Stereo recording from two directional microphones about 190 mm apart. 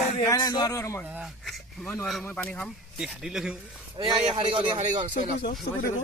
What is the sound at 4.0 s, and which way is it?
Speech, 20° right (ahead or behind).